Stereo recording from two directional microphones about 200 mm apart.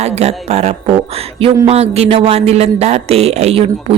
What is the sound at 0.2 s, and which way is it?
Speech, 30° right (ahead or behind).